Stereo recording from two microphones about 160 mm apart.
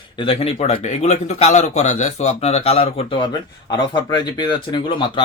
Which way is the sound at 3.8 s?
25° left (ahead or behind).